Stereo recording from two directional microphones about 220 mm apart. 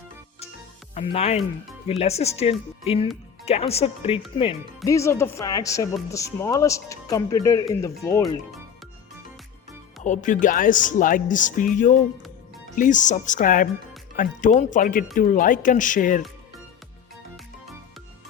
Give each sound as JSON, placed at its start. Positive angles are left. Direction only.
{"t": 0.9, "sound": "speech", "side_deg": 25}
{"t": 4.9, "sound": "speech", "side_deg": 15}
{"t": 10.0, "sound": "speech", "side_deg": 35}